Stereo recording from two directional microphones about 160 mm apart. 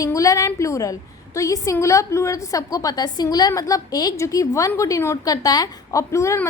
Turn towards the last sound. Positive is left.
turn(degrees=20)  # may be behind; listen again after turning